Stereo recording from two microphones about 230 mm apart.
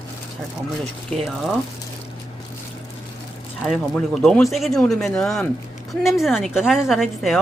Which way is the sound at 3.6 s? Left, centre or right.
Centre.